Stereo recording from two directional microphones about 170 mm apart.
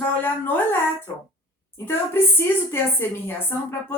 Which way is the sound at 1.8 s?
15° left (ahead or behind).